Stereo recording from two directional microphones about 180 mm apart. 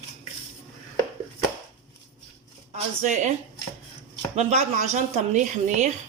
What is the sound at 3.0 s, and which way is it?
Speech, 45° right (ahead or behind).